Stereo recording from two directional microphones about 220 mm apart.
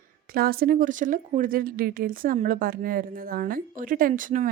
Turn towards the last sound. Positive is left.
turn(degrees=-35)  # may be behind; listen again after turning